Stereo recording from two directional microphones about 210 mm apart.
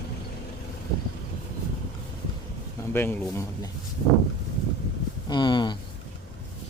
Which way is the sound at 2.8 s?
10° left (ahead or behind).